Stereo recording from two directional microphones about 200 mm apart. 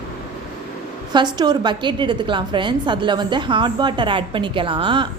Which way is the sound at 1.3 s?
20° right (ahead or behind).